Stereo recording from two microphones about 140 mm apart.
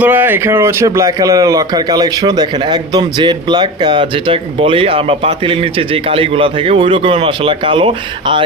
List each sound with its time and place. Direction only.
0.0 s speech: 15° right (ahead or behind); by 8.4 s 40° right (ahead or behind)